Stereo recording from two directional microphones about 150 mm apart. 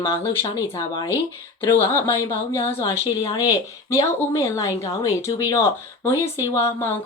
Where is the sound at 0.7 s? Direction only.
30° left (ahead or behind).